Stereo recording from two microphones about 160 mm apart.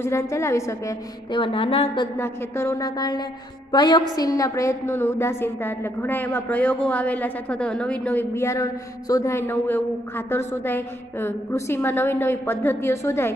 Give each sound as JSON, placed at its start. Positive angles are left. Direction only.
{"t": 0.0, "sound": "a woman's voice", "side_deg": 15}
{"t": 1.3, "sound": "speech", "side_deg": 35}
{"t": 2.1, "sound": "a woman's voice", "side_deg": 15}